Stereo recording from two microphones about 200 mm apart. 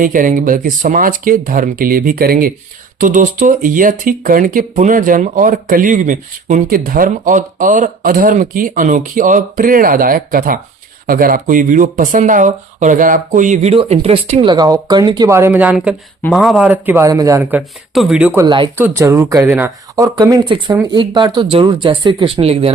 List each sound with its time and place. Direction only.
0.0 s speech: 40° right (ahead or behind); by 18.4 s 10° right (ahead or behind)
18.4 s speech: 25° right (ahead or behind)
18.8 s speech: 15° right (ahead or behind); by 22.7 s 30° right (ahead or behind)